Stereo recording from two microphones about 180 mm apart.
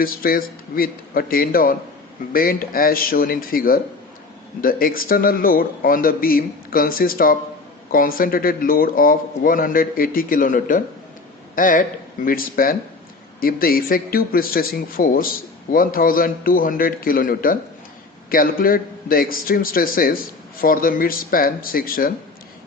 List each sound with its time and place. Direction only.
0.0 s a man's voice: 55° left (ahead or behind)